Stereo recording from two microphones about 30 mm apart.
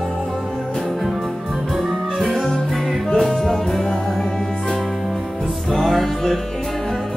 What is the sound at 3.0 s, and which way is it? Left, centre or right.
Music, centre.